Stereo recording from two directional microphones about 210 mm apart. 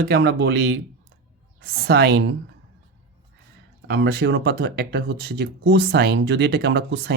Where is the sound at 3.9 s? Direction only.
50° right (ahead or behind).